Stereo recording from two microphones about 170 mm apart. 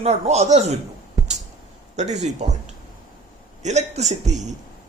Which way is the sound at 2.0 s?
45° right (ahead or behind).